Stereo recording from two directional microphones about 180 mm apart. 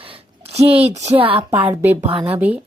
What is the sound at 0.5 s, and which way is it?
Speech, 35° right (ahead or behind).